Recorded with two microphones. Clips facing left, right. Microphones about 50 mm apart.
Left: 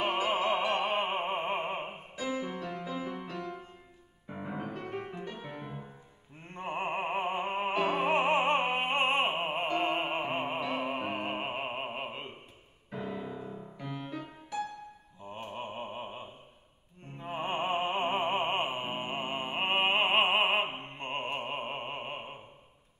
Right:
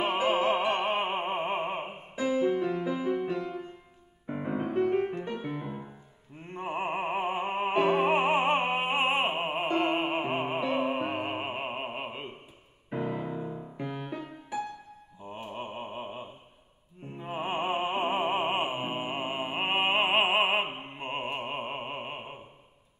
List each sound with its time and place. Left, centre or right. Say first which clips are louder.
0.0 s opera: right 3 dB; centre
2.1 s music: right 9 dB; right
5.4 s music: right 6 dB; centre
6.4 s opera: right 2 dB; centre
7.5 s music: right 6 dB; centre
9.8 s opera: right 3 dB; centre
12.9 s music: right 5 dB; right
13.8 s music: right 2 dB; centre
15.5 s a sound: right 1 dB; centre
17.0 s music: right 2 dB; centre